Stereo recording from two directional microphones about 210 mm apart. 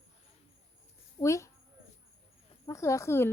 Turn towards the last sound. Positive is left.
turn(degrees=10)  # may be behind; listen again after turning